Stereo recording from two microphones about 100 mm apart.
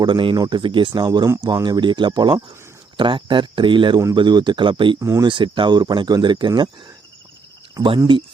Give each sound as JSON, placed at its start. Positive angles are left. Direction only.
{"t": 0.0, "sound": "speech", "side_deg": -55}
{"t": 4.9, "sound": "speech", "side_deg": -30}
{"t": 5.2, "sound": "speech", "side_deg": -55}
{"t": 7.8, "sound": "speech", "side_deg": -50}